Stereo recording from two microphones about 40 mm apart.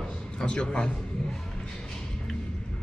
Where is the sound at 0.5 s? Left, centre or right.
Left.